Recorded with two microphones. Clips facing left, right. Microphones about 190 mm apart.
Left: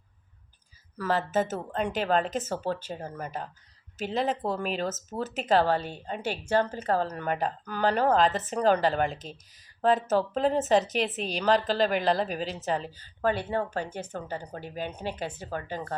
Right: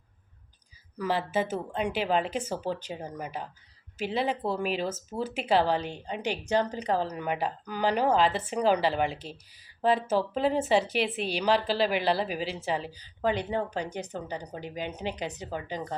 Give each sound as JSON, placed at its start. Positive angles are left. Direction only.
{"t": 0.9, "sound": "a woman's voice", "side_deg": -10}
{"t": 4.5, "sound": "a woman's voice", "side_deg": -10}